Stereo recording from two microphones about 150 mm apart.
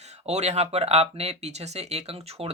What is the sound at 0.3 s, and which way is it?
Speech, 45° right (ahead or behind).